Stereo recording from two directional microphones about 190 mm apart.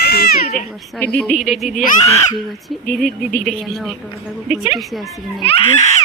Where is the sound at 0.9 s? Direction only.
10° left (ahead or behind).